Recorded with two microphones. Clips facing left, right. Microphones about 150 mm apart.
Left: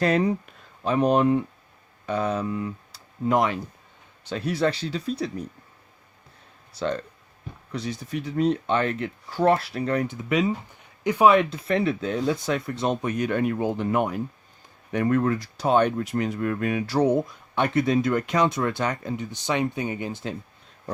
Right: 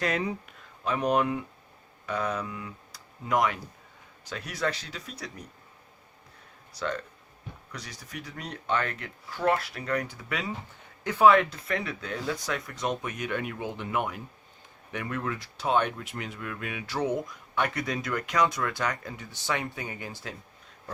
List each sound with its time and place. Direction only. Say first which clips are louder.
0.0 s speech: left 8 dB; 35° left (ahead or behind)
6.7 s speech: left 5 dB; 25° left (ahead or behind)